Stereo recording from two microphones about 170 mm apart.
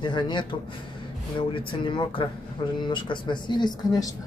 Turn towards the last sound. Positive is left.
turn(degrees=20)  # may be behind; listen again after turning